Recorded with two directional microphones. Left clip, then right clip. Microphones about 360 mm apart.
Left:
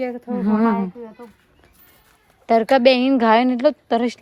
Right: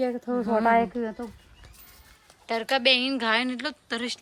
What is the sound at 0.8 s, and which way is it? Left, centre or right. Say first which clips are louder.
Speech: right 4 dB; right.